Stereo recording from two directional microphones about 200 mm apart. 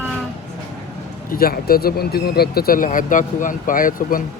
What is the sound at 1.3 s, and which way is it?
Speech, 50° left (ahead or behind).